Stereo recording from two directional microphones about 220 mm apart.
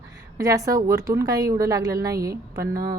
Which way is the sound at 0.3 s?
15° right (ahead or behind).